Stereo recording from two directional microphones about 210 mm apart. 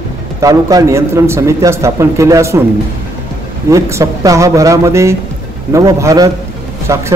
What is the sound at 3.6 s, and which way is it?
A man's voice, 15° right (ahead or behind).